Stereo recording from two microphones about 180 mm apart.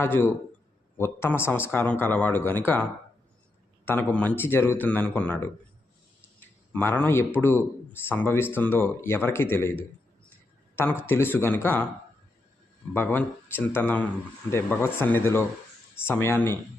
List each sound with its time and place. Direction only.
0.0 s a man's voice: 15° left (ahead or behind)
6.7 s a man's voice: 10° left (ahead or behind)
11.0 s a man's voice: 10° left (ahead or behind)
12.9 s a man's voice: 10° left (ahead or behind)